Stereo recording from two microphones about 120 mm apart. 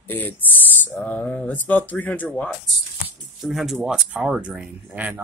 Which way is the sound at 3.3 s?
Centre (ahead or behind).